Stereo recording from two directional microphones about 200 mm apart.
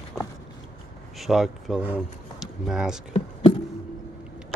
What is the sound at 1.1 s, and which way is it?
Speech, centre (ahead or behind).